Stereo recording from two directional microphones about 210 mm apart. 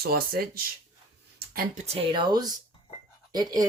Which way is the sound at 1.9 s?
25° right (ahead or behind).